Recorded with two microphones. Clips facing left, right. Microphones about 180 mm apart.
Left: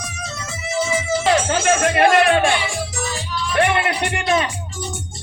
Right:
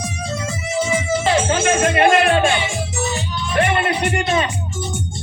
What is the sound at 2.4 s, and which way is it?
Music, 25° right (ahead or behind).